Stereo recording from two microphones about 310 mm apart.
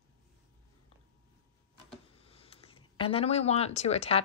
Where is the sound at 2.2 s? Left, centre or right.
Centre.